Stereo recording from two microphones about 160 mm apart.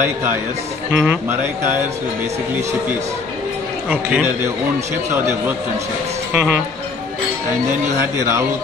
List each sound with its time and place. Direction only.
0.0 s speech: 15° right (ahead or behind)
3.9 s speech: 10° right (ahead or behind)
6.3 s speech: 5° right (ahead or behind)
8.0 s speech: 15° right (ahead or behind)